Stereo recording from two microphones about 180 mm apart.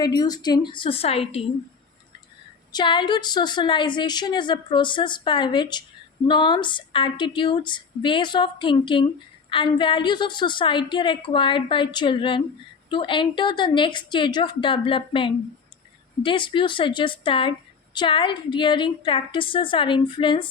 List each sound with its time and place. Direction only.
0.0 s a woman's voice: 20° left (ahead or behind)
2.7 s a woman's voice: 25° left (ahead or behind)